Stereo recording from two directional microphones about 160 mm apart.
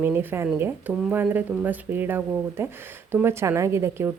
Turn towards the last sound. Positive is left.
turn(degrees=-15)  # may be behind; listen again after turning